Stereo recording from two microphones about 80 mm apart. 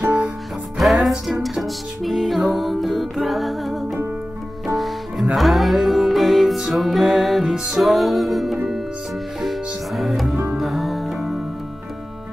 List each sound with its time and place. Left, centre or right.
0.0 s music: centre
0.7 s music: centre